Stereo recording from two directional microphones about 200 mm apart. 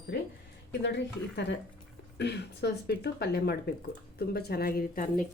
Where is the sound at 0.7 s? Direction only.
60° left (ahead or behind).